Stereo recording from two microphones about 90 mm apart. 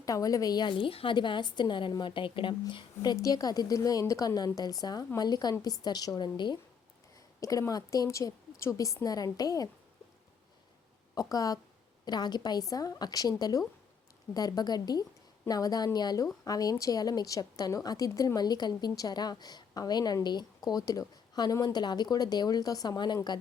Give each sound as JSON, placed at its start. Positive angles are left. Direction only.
{"t": 0.0, "sound": "a woman's voice", "side_deg": 40}
{"t": 3.2, "sound": "a woman's voice", "side_deg": 40}
{"t": 7.3, "sound": "a woman's voice", "side_deg": 40}
{"t": 11.1, "sound": "a woman's voice", "side_deg": 40}